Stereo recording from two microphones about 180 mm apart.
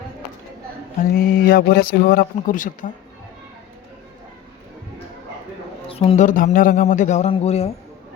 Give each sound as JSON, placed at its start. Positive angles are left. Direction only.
{"t": 1.1, "sound": "speech", "side_deg": 55}
{"t": 5.9, "sound": "a man's voice", "side_deg": 35}